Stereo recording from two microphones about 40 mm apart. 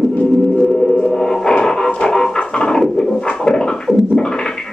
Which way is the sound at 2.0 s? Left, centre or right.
Centre.